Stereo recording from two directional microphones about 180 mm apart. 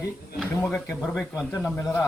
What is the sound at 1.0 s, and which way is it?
Speech, centre (ahead or behind).